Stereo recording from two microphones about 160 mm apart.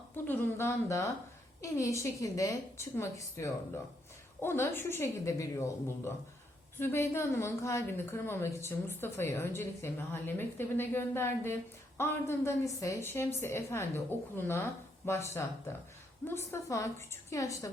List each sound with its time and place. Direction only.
0.3 s a woman's voice: 15° left (ahead or behind)